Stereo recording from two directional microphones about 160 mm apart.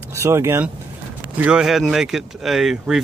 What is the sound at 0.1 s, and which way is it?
Speech, 15° right (ahead or behind).